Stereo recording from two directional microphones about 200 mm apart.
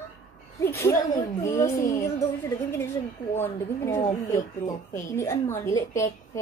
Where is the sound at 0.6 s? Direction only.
15° left (ahead or behind).